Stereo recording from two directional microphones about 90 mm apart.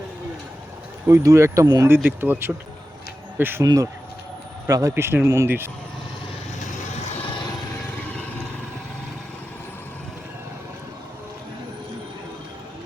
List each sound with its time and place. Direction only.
1.0 s speech: 30° right (ahead or behind)
1.6 s speech: 50° right (ahead or behind)
2.0 s speech: 20° right (ahead or behind)
3.6 s speech: 40° right (ahead or behind)